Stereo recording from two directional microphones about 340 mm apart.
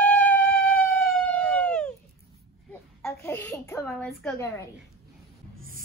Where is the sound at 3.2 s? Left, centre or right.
Centre.